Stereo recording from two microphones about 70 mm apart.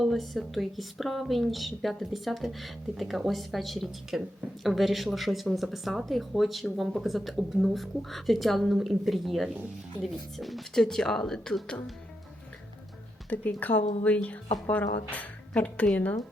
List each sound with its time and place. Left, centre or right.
0.0 s speech: centre
13.3 s speech: left